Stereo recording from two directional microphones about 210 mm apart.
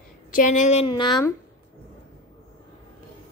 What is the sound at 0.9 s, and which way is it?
Speech, 20° left (ahead or behind).